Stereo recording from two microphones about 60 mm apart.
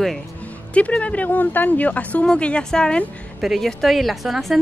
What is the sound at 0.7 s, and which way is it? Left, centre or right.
A woman's voice, left.